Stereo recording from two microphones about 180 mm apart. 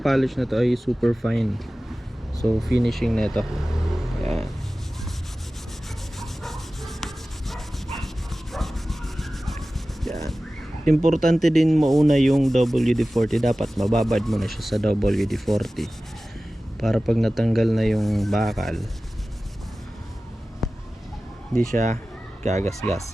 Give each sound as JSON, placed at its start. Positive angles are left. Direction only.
{"t": 0.0, "sound": "sanding", "side_deg": 0}
{"t": 6.1, "sound": "rub", "side_deg": 0}
{"t": 10.8, "sound": "sanding", "side_deg": 0}
{"t": 20.6, "sound": "a sound", "side_deg": 0}
{"t": 21.5, "sound": "speech", "side_deg": 5}
{"t": 22.4, "sound": "speech", "side_deg": -40}